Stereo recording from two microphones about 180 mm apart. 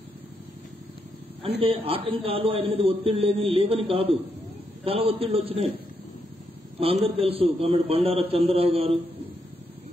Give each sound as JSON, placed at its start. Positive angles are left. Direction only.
{"t": 1.6, "sound": "a man's voice", "side_deg": -30}
{"t": 6.8, "sound": "a man's voice", "side_deg": -30}